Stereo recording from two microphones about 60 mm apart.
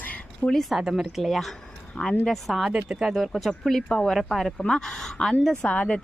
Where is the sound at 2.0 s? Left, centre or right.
Centre.